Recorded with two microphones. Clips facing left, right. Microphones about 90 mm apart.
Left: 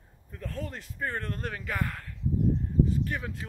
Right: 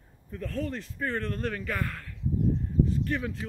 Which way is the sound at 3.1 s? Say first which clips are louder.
Right 4 dB; 15° left (ahead or behind).